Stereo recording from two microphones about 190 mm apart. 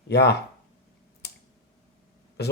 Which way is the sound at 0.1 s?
60° left (ahead or behind).